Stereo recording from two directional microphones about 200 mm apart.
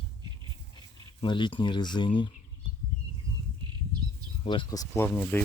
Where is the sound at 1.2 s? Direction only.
25° left (ahead or behind).